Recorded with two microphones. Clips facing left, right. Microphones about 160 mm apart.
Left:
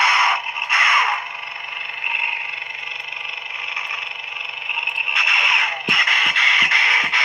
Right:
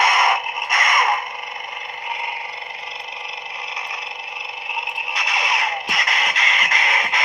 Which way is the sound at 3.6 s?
35° right (ahead or behind).